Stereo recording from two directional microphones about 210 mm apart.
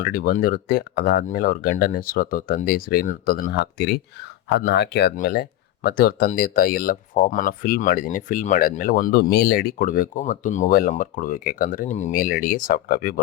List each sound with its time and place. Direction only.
0.0 s speech: 45° left (ahead or behind)